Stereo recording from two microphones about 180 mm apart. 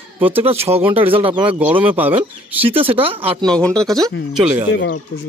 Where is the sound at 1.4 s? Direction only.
10° right (ahead or behind).